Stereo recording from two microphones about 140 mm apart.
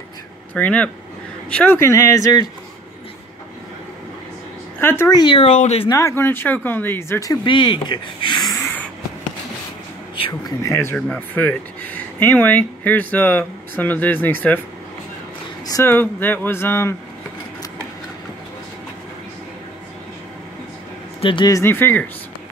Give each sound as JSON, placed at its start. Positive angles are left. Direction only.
{"t": 0.6, "sound": "speech", "side_deg": 10}
{"t": 4.7, "sound": "speech", "side_deg": 15}
{"t": 5.2, "sound": "speech", "side_deg": 40}
{"t": 5.5, "sound": "speech", "side_deg": 50}
{"t": 5.9, "sound": "speech", "side_deg": 20}
{"t": 7.4, "sound": "speech", "side_deg": 35}
{"t": 10.6, "sound": "speech", "side_deg": 20}
{"t": 15.6, "sound": "speech", "side_deg": 20}
{"t": 21.2, "sound": "speech", "side_deg": 35}
{"t": 21.5, "sound": "speech", "side_deg": 15}